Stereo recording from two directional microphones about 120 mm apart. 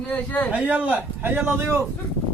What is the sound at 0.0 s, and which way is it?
Speech, 10° left (ahead or behind).